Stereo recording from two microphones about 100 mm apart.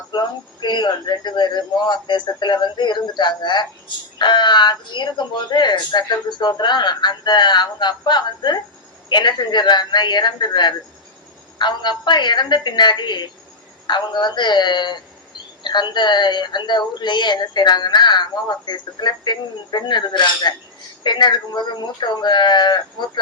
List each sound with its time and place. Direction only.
0.1 s speech: 50° left (ahead or behind)